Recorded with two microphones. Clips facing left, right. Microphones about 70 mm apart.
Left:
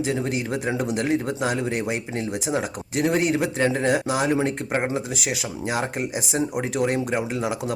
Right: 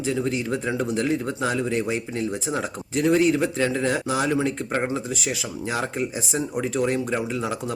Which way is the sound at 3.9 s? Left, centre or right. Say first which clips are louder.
Left 2 dB; centre.